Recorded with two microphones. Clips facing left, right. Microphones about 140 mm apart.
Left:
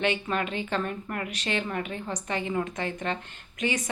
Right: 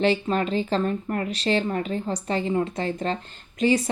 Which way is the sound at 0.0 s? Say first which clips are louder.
Right 5 dB; 30° right (ahead or behind).